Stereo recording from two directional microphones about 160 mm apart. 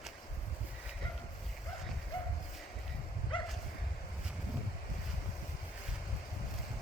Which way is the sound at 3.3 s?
30° left (ahead or behind).